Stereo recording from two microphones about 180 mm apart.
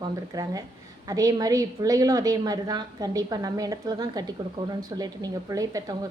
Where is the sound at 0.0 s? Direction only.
20° right (ahead or behind).